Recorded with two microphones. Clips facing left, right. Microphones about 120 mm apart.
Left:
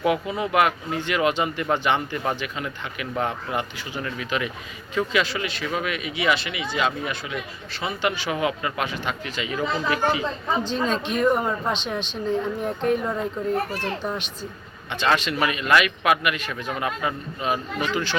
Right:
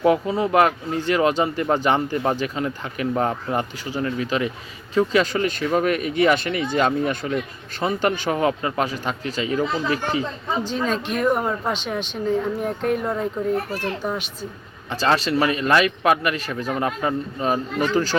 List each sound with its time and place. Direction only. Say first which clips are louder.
0.0 s speech: right 5 dB; 35° right (ahead or behind)
10.6 s a child's voice: right 3 dB; 5° right (ahead or behind)
14.8 s speech: right 2 dB; 35° right (ahead or behind)